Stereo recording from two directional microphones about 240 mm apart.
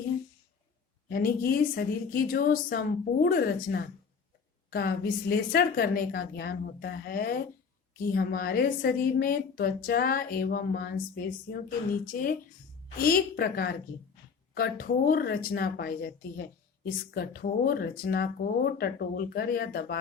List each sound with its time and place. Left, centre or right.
1.0 s a woman's voice: left